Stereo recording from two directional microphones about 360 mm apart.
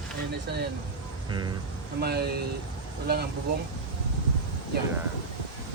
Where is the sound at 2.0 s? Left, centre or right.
Right.